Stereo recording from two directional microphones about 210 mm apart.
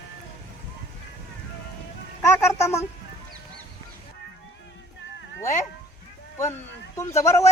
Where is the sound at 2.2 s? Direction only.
10° left (ahead or behind).